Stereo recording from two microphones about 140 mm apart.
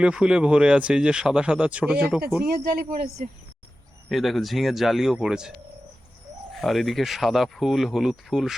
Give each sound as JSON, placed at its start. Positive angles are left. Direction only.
{"t": 0.0, "sound": "speech", "side_deg": -5}
{"t": 2.4, "sound": "speech", "side_deg": -90}
{"t": 4.1, "sound": "speech", "side_deg": 0}
{"t": 6.6, "sound": "speech", "side_deg": 0}